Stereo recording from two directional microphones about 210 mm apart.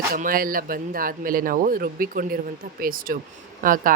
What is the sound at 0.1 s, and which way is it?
Speech, 40° right (ahead or behind).